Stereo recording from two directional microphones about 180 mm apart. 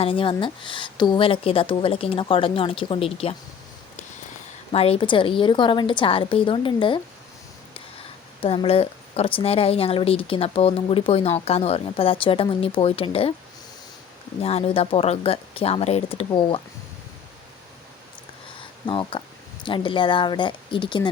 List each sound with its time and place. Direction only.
0.0 s a woman's voice: 30° left (ahead or behind)
4.7 s a woman's voice: 30° left (ahead or behind)
8.4 s a woman's voice: 30° left (ahead or behind)
14.4 s a woman's voice: 35° left (ahead or behind)
18.9 s a woman's voice: 30° left (ahead or behind)